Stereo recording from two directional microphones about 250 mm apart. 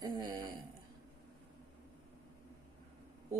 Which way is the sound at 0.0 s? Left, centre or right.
Centre.